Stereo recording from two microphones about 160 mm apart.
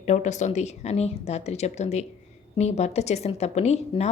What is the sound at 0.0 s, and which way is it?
A woman's voice, 50° left (ahead or behind).